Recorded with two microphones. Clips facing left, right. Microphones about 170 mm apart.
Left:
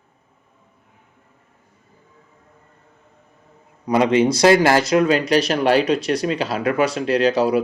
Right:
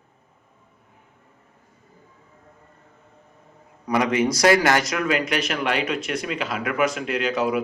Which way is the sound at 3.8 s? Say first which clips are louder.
Left 5 dB; 25° left (ahead or behind).